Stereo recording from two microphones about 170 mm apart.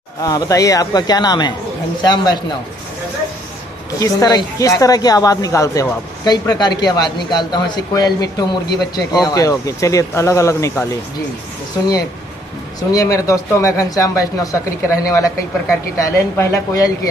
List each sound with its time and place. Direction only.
0.2 s a woman's voice: 20° left (ahead or behind)
4.0 s a woman's voice: 20° left (ahead or behind)
12.9 s a woman's voice: 20° left (ahead or behind)